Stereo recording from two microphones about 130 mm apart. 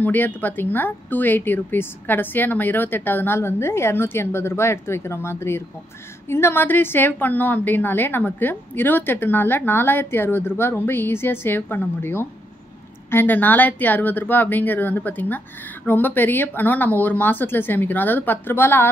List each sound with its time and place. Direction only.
0.0 s a woman's voice: 15° left (ahead or behind)